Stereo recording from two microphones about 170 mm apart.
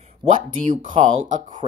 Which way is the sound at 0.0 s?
40° right (ahead or behind).